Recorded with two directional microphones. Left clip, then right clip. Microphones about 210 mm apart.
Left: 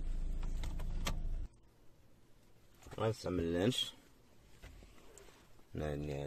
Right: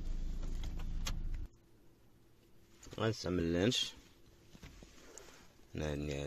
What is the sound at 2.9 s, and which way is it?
Speech, 5° right (ahead or behind).